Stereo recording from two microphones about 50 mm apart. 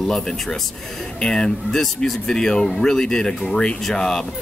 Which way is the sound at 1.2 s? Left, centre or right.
Centre.